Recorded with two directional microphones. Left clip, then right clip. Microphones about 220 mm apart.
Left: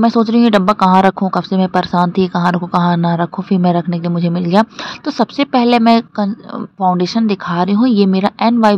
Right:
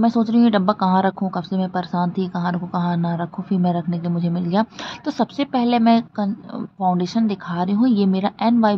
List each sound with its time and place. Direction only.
0.0 s speech: 30° left (ahead or behind)